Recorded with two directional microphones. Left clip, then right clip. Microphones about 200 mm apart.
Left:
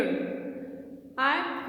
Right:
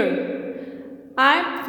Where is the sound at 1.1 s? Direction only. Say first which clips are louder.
Right 9 dB; 45° right (ahead or behind).